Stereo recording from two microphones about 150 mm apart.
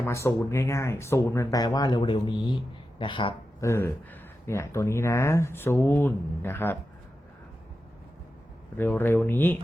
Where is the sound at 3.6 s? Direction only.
15° left (ahead or behind).